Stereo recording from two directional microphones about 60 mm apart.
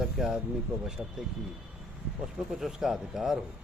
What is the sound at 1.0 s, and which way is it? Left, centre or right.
Speech, centre.